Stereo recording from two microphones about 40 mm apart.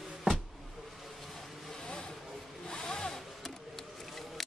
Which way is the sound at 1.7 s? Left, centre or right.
Left.